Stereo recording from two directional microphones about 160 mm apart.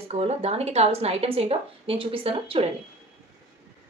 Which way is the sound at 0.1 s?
40° right (ahead or behind).